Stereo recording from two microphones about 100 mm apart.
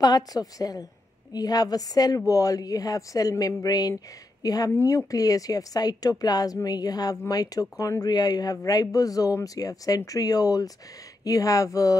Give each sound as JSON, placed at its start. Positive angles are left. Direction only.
{"t": 0.0, "sound": "a woman's voice", "side_deg": 40}